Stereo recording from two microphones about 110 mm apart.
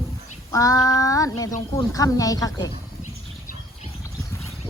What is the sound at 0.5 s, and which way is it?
Speech, 30° left (ahead or behind).